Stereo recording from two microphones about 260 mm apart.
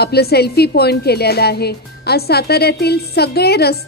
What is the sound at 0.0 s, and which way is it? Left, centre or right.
A woman's voice, left.